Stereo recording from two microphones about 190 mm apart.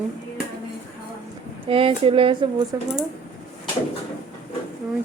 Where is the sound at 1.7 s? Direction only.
30° right (ahead or behind).